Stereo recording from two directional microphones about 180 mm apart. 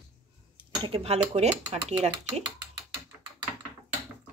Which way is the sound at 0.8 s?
30° right (ahead or behind).